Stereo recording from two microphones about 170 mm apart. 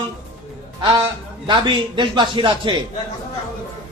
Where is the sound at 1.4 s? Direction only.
30° right (ahead or behind).